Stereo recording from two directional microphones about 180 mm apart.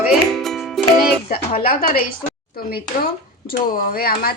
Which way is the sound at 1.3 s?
55° left (ahead or behind).